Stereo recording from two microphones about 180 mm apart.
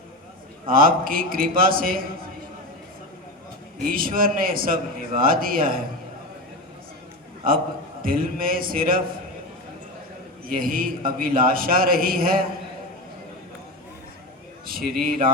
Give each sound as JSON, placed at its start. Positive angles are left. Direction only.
{"t": 0.7, "sound": "a man's voice", "side_deg": -50}
{"t": 3.9, "sound": "a man's voice", "side_deg": -55}
{"t": 8.0, "sound": "a man's voice", "side_deg": -55}
{"t": 10.5, "sound": "a man's voice", "side_deg": -50}
{"t": 14.7, "sound": "a man's voice", "side_deg": -55}